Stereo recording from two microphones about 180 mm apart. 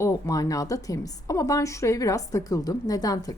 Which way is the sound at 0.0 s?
20° left (ahead or behind).